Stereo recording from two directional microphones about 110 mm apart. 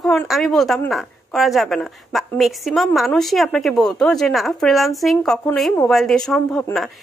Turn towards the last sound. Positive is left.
turn(degrees=5)  # may be behind; listen again after turning